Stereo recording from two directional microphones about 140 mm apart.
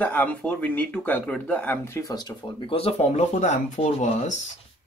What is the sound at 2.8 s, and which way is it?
Speech, 50° left (ahead or behind).